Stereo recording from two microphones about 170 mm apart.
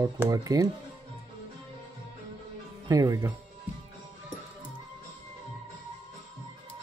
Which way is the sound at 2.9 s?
20° right (ahead or behind).